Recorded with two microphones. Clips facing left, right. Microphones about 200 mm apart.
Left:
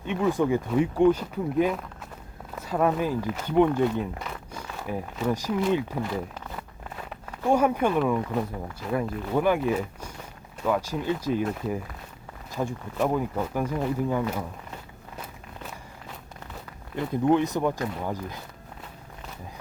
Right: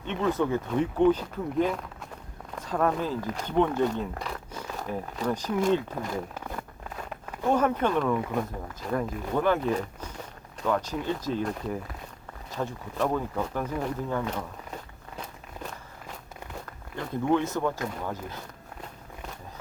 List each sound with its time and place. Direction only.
0.0 s speech: 10° left (ahead or behind)
7.5 s speech: 10° left (ahead or behind)
16.9 s speech: 15° left (ahead or behind)